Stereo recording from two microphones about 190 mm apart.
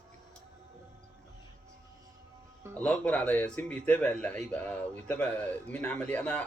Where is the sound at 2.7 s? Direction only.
10° left (ahead or behind).